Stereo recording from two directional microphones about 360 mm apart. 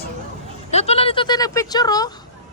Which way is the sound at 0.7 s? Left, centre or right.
Centre.